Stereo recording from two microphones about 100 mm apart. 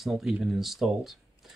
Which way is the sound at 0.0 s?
5° right (ahead or behind).